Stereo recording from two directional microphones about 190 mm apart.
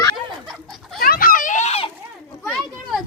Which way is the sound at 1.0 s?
50° left (ahead or behind).